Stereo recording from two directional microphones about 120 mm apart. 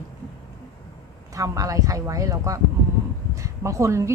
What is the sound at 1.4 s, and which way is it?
A woman's voice, 25° right (ahead or behind).